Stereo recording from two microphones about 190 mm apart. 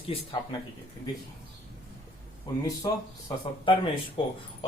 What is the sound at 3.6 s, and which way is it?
Speech, 25° left (ahead or behind).